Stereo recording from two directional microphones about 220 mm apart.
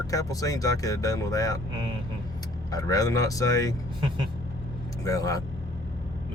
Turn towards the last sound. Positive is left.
turn(degrees=15)  # may be behind; listen again after turning